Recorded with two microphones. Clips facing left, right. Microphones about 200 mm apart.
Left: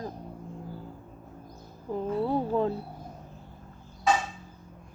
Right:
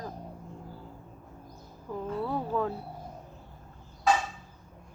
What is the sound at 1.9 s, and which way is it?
Speech, 25° left (ahead or behind).